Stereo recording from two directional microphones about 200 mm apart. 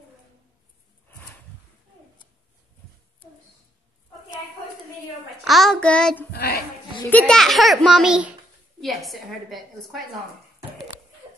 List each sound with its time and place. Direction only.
5.4 s child singing: centre (ahead or behind)
6.3 s speech: 50° left (ahead or behind)
7.1 s a child's voice: 5° left (ahead or behind)